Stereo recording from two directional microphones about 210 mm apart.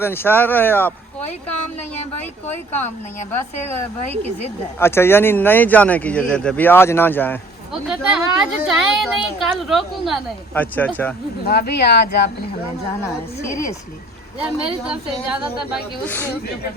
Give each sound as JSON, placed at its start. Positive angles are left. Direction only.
{"t": 0.0, "sound": "speech", "side_deg": 10}
{"t": 4.8, "sound": "speech", "side_deg": 10}
{"t": 7.7, "sound": "a woman's voice", "side_deg": -5}
{"t": 11.4, "sound": "speech", "side_deg": 50}
{"t": 13.4, "sound": "speech", "side_deg": 15}
{"t": 14.4, "sound": "a woman's voice", "side_deg": -5}
{"t": 16.0, "sound": "speech", "side_deg": 10}